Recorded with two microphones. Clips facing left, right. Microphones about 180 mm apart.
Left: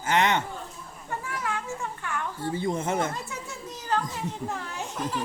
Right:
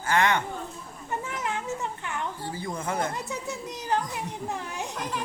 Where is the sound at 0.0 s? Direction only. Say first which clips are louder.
Even; 20° left (ahead or behind).